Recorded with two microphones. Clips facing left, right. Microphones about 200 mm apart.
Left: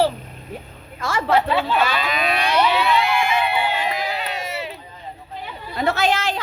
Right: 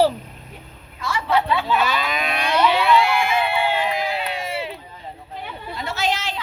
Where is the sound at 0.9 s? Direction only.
45° left (ahead or behind).